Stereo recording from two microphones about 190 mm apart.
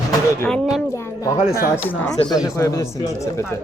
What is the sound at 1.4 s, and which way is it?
Speech, 50° left (ahead or behind).